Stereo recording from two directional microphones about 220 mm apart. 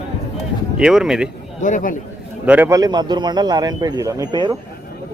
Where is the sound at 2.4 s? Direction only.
5° right (ahead or behind).